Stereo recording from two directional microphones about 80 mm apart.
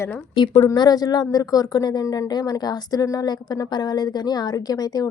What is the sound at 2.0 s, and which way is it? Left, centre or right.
Speech, left.